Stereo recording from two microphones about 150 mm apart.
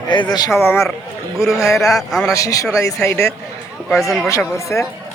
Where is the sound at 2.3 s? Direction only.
20° left (ahead or behind).